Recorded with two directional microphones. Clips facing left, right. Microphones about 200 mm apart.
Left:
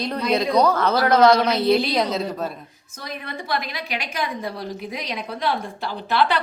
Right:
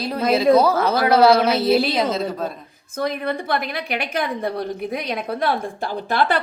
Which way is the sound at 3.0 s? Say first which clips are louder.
Right 10 dB; 55° right (ahead or behind).